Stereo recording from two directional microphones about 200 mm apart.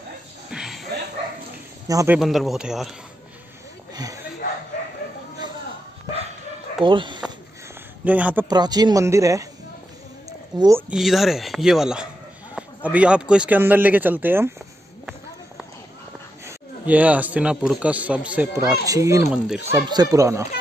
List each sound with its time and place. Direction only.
0.5 s a sound: centre (ahead or behind)
1.9 s a man's voice: 15° right (ahead or behind)
2.1 s speech: centre (ahead or behind)
3.9 s a sound: 20° right (ahead or behind)
6.8 s speech: 25° right (ahead or behind)
8.0 s a man's voice: 5° right (ahead or behind)
8.5 s a man's voice: 20° right (ahead or behind)
10.5 s speech: 20° right (ahead or behind)
10.9 s a man's voice: centre (ahead or behind)
16.4 s a man's voice: 10° right (ahead or behind)